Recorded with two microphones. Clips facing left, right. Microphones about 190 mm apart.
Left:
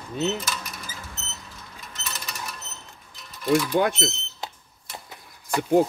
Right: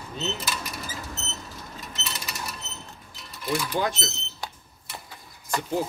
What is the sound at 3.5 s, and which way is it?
Speech, 60° left (ahead or behind).